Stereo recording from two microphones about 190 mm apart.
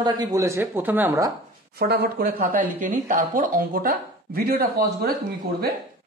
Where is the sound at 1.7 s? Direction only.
55° right (ahead or behind).